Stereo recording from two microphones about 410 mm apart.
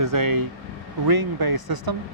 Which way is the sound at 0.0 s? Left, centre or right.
Right.